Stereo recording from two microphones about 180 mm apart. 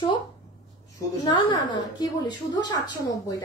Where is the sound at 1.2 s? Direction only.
25° left (ahead or behind).